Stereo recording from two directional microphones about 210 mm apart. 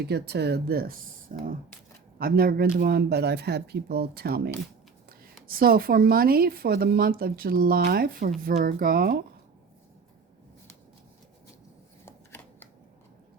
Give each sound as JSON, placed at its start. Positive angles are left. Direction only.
{"t": 0.0, "sound": "a woman's voice", "side_deg": -50}
{"t": 12.0, "sound": "shuffling cards", "side_deg": 10}